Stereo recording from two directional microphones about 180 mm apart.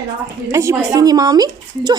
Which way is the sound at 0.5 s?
15° right (ahead or behind).